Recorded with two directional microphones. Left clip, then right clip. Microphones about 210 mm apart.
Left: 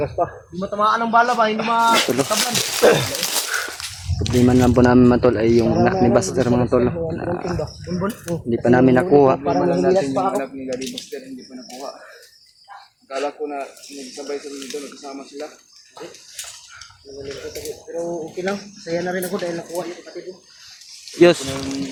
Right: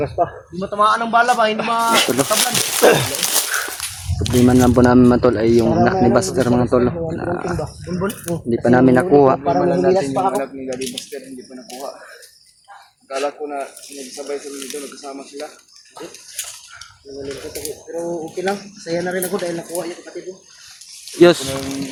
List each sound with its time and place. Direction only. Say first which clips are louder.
0.0 s a man's voice: right 2 dB; 50° right (ahead or behind)
4.4 s speech: right 2 dB; 5° right (ahead or behind)
7.6 s speech: right 1 dB; 45° right (ahead or behind)
8.4 s speech: right 2 dB; centre (ahead or behind)
9.4 s a man's voice: right 2 dB; 55° right (ahead or behind)
13.1 s a man's voice: right 2 dB; 50° right (ahead or behind)
14.2 s a man's voice: right 2 dB; 40° right (ahead or behind)
17.2 s a man's voice: right 1 dB; 45° right (ahead or behind)
17.9 s a man's voice: right 1 dB; 60° right (ahead or behind)
21.2 s speech: right 2 dB; 10° right (ahead or behind)
21.4 s speech: right 2 dB; 40° right (ahead or behind)